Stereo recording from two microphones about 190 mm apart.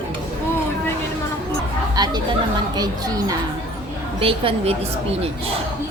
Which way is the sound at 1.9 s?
20° right (ahead or behind).